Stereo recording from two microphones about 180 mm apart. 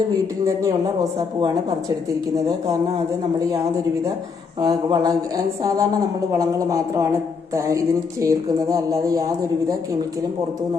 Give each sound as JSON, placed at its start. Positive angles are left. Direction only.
{"t": 4.6, "sound": "a man's voice", "side_deg": -20}